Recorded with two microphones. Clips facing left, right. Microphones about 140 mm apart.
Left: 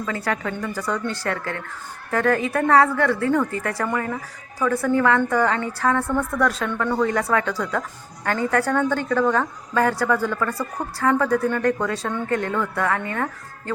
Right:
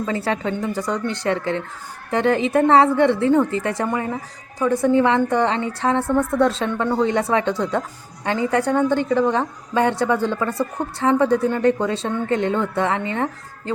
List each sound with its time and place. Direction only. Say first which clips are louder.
0.0 s a woman's voice: right 3 dB; 25° right (ahead or behind)